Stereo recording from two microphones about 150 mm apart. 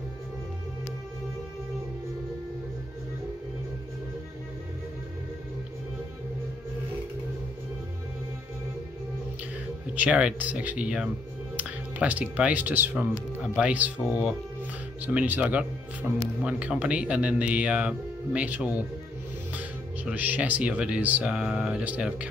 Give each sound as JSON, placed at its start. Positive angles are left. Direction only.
{"t": 9.9, "sound": "speech", "side_deg": -10}
{"t": 20.1, "sound": "speech", "side_deg": -10}